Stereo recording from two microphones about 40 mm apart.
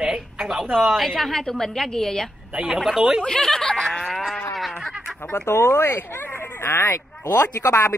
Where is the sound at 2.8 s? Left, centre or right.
Centre.